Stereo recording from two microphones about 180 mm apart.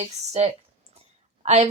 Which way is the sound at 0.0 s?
35° right (ahead or behind).